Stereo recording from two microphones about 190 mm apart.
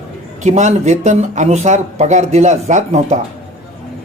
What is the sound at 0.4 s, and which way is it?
Speech, 40° right (ahead or behind).